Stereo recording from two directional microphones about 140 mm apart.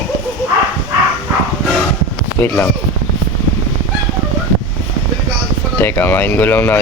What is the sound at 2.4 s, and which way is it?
Speech, 15° left (ahead or behind).